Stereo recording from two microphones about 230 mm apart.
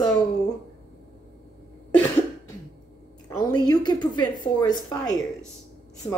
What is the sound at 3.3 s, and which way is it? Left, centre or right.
A woman's voice, centre.